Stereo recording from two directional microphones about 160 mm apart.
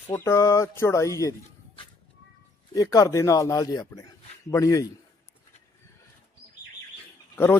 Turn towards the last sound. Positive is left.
turn(degrees=15)  # may be behind; listen again after turning